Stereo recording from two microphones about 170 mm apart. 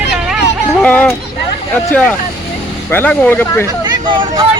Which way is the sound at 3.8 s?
25° right (ahead or behind).